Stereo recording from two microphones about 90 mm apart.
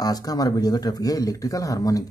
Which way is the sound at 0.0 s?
45° left (ahead or behind).